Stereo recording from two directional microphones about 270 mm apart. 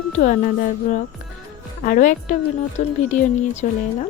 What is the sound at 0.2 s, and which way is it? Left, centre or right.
A woman's voice, left.